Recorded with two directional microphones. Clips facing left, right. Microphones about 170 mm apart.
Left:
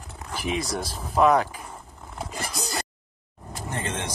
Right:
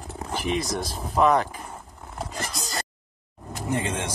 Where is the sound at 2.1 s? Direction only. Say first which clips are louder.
Even; 5° left (ahead or behind).